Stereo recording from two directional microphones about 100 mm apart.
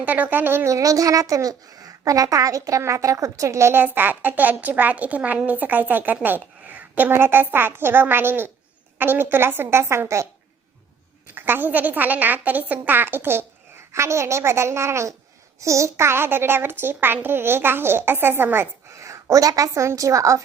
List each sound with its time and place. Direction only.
0.0 s speech: 15° right (ahead or behind)
11.3 s speech: 20° right (ahead or behind)